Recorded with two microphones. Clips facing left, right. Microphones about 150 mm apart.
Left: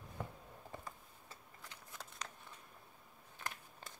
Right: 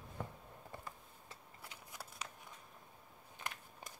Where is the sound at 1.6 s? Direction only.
10° right (ahead or behind).